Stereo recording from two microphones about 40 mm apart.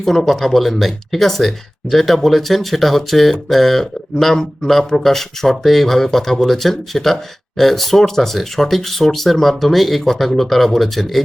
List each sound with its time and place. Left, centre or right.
0.0 s speech: centre